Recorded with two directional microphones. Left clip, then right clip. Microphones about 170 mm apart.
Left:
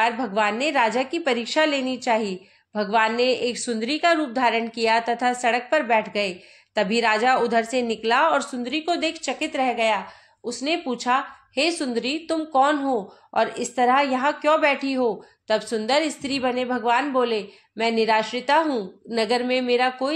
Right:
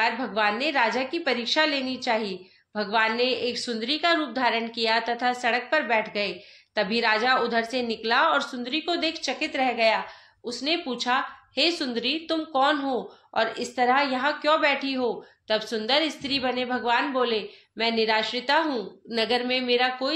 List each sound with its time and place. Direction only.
0.0 s a woman's voice: 45° left (ahead or behind)